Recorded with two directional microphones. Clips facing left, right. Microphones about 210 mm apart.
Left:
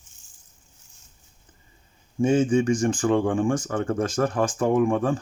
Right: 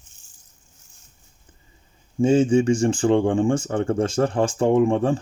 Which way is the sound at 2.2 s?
25° right (ahead or behind).